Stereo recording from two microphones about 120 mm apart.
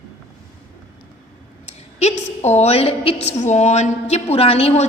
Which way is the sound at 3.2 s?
70° left (ahead or behind).